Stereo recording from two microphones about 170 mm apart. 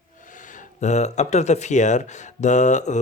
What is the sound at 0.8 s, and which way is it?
Speech, 40° left (ahead or behind).